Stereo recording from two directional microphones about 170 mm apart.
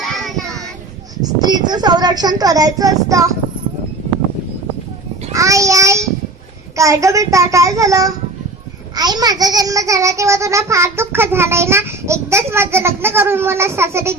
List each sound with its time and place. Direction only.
0.0 s child singing: centre (ahead or behind)
1.2 s speech: 25° right (ahead or behind)
5.3 s child singing: 20° right (ahead or behind)
6.7 s a child's voice: 20° right (ahead or behind)